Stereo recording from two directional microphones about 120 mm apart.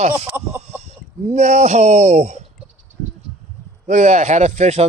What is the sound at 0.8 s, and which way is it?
Speech, 70° right (ahead or behind).